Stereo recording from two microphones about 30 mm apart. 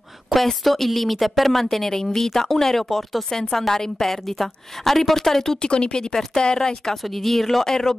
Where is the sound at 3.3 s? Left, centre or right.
Left.